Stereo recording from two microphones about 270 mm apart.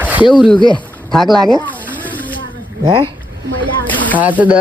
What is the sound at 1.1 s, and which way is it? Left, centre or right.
Speech, centre.